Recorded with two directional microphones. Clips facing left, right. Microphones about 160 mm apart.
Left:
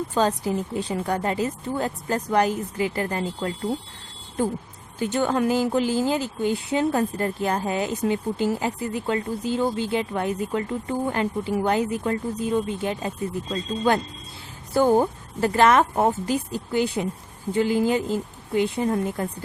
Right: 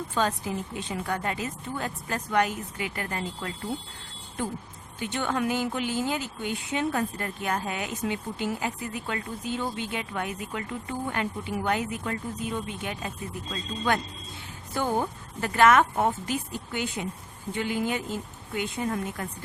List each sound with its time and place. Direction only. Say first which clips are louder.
0.1 s speech: left 5 dB; 35° left (ahead or behind)
4.9 s speech: left 6 dB; 40° left (ahead or behind)